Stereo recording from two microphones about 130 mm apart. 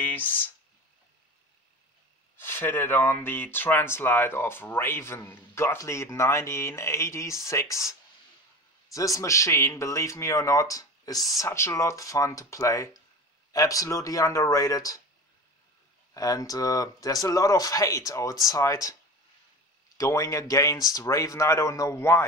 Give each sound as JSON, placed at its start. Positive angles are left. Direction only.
{"t": 0.0, "sound": "a sound", "side_deg": 15}
{"t": 2.3, "sound": "speech", "side_deg": 20}
{"t": 8.9, "sound": "speech", "side_deg": 25}
{"t": 16.1, "sound": "speech", "side_deg": 25}
{"t": 20.0, "sound": "speech", "side_deg": 25}